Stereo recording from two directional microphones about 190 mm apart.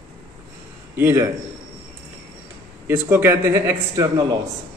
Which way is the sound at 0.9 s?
10° right (ahead or behind).